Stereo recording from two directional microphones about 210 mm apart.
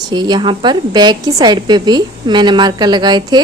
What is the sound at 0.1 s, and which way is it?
A woman's voice, 20° right (ahead or behind).